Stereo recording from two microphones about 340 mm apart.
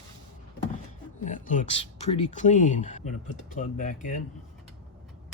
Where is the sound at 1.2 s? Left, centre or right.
Left.